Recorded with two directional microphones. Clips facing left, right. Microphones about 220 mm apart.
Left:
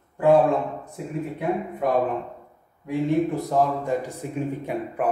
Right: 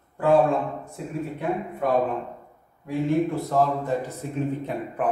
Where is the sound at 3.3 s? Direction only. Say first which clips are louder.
Even; 15° left (ahead or behind).